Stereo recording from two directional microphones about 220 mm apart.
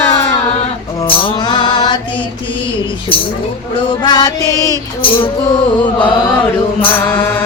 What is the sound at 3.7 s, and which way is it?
Music, 20° left (ahead or behind).